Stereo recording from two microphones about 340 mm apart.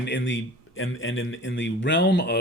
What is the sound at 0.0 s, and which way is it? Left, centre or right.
Speech, left.